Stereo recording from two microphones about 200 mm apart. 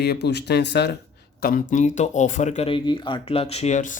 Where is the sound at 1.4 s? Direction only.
45° left (ahead or behind).